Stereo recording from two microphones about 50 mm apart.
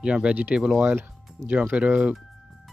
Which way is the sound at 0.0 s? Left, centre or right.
Centre.